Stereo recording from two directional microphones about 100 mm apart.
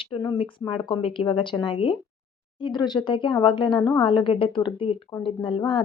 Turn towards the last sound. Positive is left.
turn(degrees=55)  # may be behind; listen again after turning